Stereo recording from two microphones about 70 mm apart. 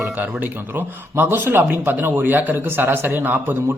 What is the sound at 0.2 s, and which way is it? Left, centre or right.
A man's voice, right.